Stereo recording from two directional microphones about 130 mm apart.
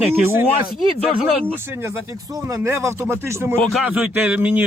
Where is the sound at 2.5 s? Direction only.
20° right (ahead or behind).